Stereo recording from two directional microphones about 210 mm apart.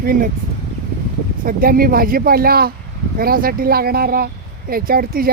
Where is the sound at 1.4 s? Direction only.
45° right (ahead or behind).